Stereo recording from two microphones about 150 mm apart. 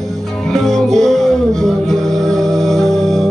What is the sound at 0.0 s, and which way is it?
Music, centre (ahead or behind).